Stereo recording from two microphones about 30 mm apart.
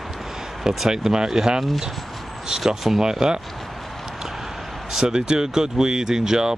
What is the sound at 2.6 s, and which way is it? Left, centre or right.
Speech, centre.